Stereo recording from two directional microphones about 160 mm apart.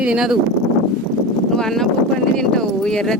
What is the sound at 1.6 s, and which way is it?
Speech, 5° left (ahead or behind).